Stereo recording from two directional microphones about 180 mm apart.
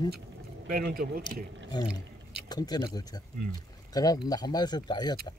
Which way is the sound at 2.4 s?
20° left (ahead or behind).